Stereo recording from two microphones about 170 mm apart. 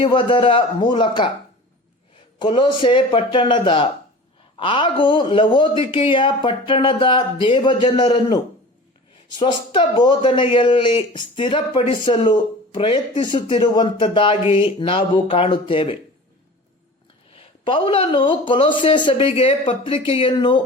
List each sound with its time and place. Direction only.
0.0 s speech: 30° left (ahead or behind)
2.4 s speech: 30° left (ahead or behind)
17.3 s speech: 30° left (ahead or behind)